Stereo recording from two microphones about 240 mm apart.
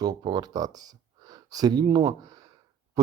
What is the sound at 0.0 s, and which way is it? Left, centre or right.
Speech, centre.